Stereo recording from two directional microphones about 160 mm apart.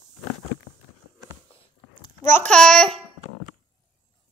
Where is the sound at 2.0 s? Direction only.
15° left (ahead or behind).